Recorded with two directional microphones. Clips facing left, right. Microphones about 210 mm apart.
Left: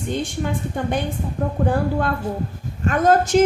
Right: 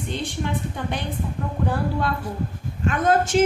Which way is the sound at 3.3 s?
40° left (ahead or behind).